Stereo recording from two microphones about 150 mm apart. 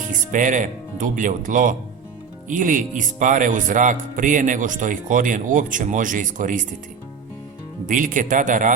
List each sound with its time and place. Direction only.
0.1 s speech: 60° right (ahead or behind)
7.9 s speech: 60° right (ahead or behind)